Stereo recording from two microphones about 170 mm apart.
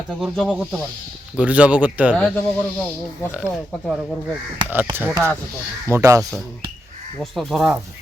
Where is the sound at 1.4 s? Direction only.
10° right (ahead or behind).